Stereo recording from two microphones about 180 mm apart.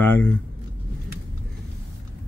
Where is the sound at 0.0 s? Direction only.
10° left (ahead or behind).